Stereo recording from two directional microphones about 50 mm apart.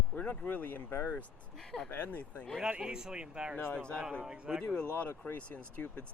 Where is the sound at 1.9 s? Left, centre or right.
Left.